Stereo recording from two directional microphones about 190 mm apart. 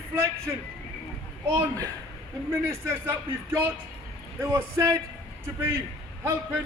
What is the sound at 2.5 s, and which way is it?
A man's voice, 10° right (ahead or behind).